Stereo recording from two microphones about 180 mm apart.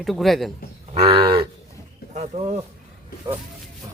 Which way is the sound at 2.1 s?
40° right (ahead or behind).